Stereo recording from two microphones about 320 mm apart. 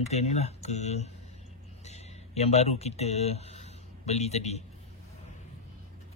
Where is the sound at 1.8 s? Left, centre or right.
Centre.